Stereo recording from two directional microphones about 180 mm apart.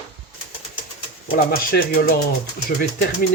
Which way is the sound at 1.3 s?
55° left (ahead or behind).